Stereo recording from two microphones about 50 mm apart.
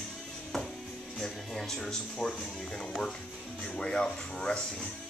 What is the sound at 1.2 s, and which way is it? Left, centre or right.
Music, centre.